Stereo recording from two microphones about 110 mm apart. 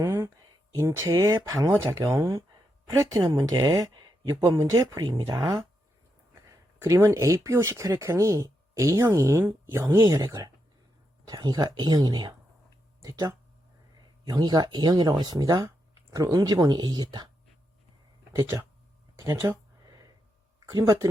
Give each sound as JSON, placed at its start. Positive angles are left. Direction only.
{"t": 0.0, "sound": "a sound", "side_deg": -25}
{"t": 0.8, "sound": "speech", "side_deg": -30}
{"t": 6.8, "sound": "speech", "side_deg": -30}
{"t": 18.5, "sound": "speech", "side_deg": -25}
{"t": 20.7, "sound": "speech", "side_deg": -35}